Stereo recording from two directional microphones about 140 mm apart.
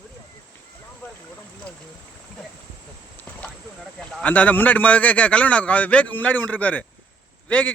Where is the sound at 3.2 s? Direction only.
10° left (ahead or behind).